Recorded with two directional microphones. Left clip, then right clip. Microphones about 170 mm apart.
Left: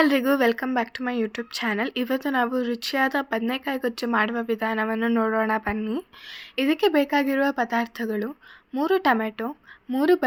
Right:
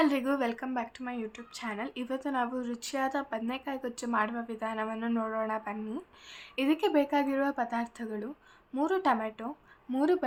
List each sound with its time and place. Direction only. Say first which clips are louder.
0.0 s speech: left 8 dB; 40° left (ahead or behind)
6.6 s speech: left 6 dB; 30° left (ahead or behind)